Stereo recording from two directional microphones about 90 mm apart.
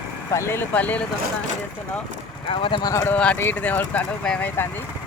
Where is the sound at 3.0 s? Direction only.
15° left (ahead or behind).